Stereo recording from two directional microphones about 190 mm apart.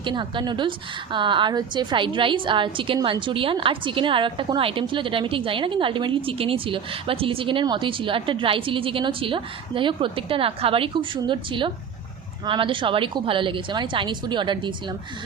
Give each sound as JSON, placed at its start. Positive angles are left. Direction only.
{"t": 0.0, "sound": "a woman's voice", "side_deg": -25}